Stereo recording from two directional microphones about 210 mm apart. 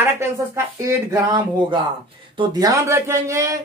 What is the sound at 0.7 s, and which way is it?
Speech, 15° right (ahead or behind).